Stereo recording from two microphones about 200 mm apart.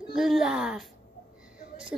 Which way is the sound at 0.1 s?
Centre (ahead or behind).